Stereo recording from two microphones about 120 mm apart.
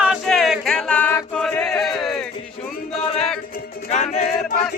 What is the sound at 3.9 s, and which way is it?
Music, 80° left.